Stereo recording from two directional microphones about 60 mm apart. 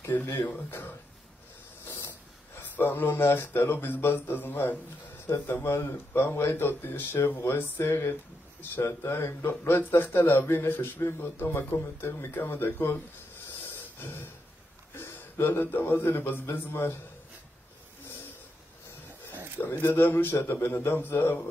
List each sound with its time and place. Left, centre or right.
0.0 s speech: left
5.6 s speech: left
13.9 s a sound: left
15.0 s a man's voice: left
19.6 s a man's voice: left